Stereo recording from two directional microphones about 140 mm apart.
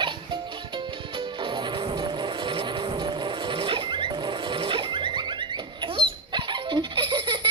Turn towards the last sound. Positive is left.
turn(degrees=-30)  # may be behind; listen again after turning